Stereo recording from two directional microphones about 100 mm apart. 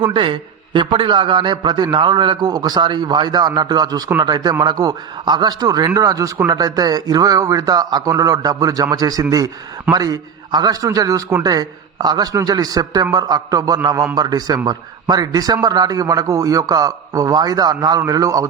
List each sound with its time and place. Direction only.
0.0 s a man's voice: 60° right (ahead or behind); by 18.4 s 35° right (ahead or behind)